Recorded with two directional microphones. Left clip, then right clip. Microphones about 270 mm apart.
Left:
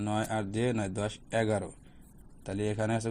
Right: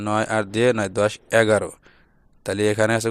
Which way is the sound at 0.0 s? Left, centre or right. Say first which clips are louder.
Right 11 dB; right.